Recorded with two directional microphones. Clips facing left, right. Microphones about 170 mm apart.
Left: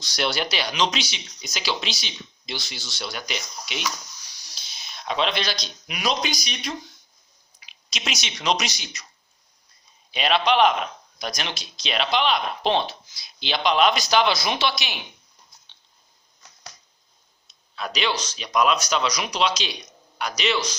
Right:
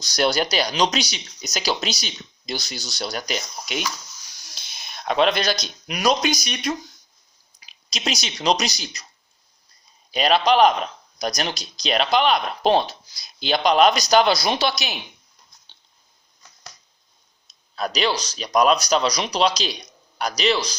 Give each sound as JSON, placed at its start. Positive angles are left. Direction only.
{"t": 0.0, "sound": "speech", "side_deg": -40}
{"t": 7.6, "sound": "speech", "side_deg": -35}
{"t": 10.1, "sound": "speech", "side_deg": -40}
{"t": 15.7, "sound": "biting", "side_deg": -35}
{"t": 17.5, "sound": "speech", "side_deg": -40}